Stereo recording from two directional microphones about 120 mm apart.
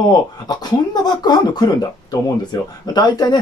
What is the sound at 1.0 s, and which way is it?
Speech, 35° left (ahead or behind).